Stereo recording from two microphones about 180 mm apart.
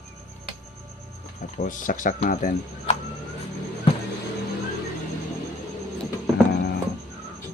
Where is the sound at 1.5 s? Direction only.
45° left (ahead or behind).